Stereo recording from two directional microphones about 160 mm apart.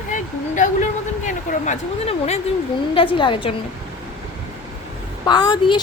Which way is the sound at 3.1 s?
30° left (ahead or behind).